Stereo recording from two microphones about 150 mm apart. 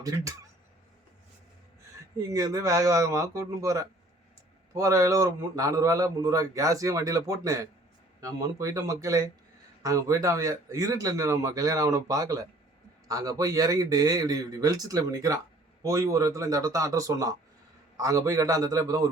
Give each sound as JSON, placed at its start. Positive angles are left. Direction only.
{"t": 0.0, "sound": "a man's voice", "side_deg": -25}
{"t": 2.3, "sound": "a man's voice", "side_deg": -20}